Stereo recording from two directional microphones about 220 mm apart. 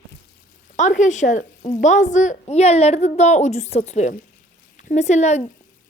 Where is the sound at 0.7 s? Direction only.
35° left (ahead or behind).